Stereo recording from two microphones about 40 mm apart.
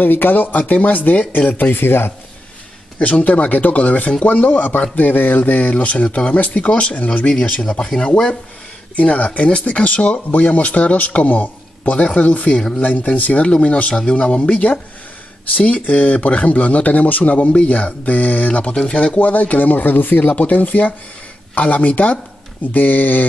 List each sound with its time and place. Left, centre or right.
0.0 s speech: left
1.5 s speech: left
3.0 s speech: left
8.9 s speech: left
15.5 s speech: left
22.7 s speech: left